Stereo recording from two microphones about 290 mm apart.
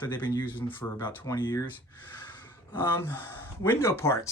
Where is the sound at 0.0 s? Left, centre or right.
Centre.